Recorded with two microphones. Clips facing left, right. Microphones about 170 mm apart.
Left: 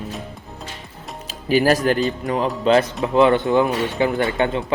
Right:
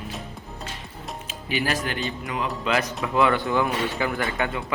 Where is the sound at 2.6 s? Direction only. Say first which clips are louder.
Left 10 dB; 30° left (ahead or behind).